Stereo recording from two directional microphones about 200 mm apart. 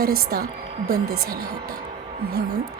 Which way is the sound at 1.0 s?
90° right.